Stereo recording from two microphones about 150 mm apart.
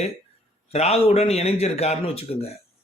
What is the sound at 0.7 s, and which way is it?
Speech, 45° left (ahead or behind).